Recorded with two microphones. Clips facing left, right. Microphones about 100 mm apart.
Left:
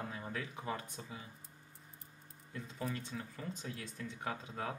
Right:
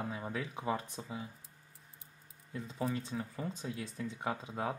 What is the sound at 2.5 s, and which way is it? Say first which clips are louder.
Speech: right 5 dB; 25° right (ahead or behind).